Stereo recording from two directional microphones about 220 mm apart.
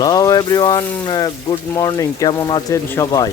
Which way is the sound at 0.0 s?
15° left (ahead or behind).